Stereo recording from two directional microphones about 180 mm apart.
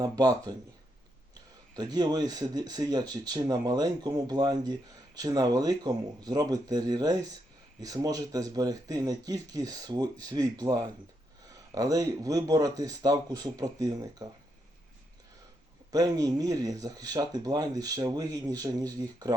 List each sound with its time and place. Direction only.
0.0 s speech: 20° right (ahead or behind)
15.9 s speech: 20° right (ahead or behind)